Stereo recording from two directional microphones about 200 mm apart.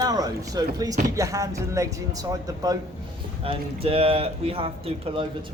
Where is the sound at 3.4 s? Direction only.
30° right (ahead or behind).